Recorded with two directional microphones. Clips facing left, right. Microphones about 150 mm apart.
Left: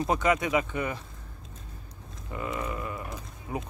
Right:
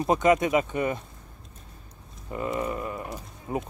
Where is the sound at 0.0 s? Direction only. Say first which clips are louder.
Right 4 dB; 20° right (ahead or behind).